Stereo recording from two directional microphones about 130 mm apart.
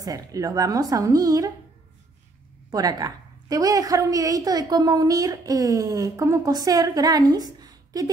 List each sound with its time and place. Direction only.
0.0 s a woman's voice: 25° right (ahead or behind)
2.7 s a woman's voice: 30° right (ahead or behind)